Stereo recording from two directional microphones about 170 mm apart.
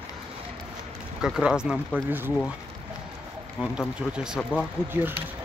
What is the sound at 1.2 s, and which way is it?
Speech, 5° right (ahead or behind).